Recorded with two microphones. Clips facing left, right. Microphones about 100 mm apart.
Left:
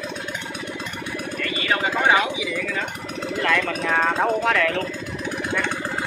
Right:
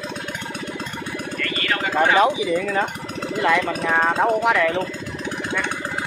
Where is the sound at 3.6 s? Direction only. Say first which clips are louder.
Right 2 dB; 5° right (ahead or behind).